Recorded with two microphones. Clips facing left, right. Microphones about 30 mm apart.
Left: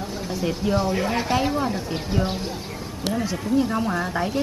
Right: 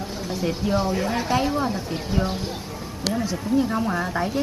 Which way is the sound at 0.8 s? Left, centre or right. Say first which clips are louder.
Left 1 dB; centre.